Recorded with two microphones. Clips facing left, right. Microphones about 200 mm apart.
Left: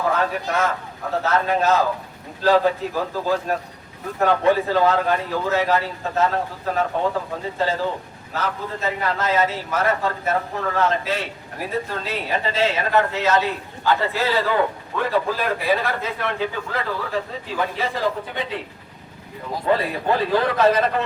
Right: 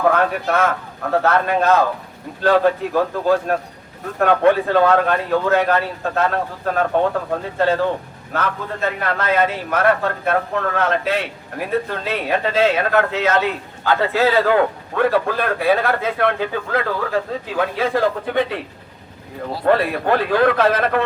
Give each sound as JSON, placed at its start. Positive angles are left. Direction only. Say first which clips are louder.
{"t": 0.0, "sound": "speech", "louder": "right 5 dB", "side_deg": -60}
{"t": 19.6, "sound": "speech", "louder": "right 4 dB", "side_deg": -65}